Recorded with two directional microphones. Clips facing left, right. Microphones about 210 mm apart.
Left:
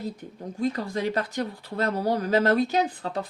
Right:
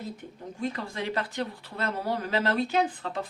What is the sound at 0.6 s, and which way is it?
Speech, 40° left (ahead or behind).